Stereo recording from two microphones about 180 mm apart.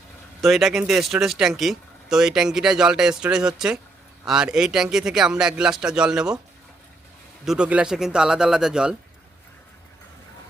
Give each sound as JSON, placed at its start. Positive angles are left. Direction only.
{"t": 0.4, "sound": "speech", "side_deg": 0}
{"t": 7.4, "sound": "speech", "side_deg": -5}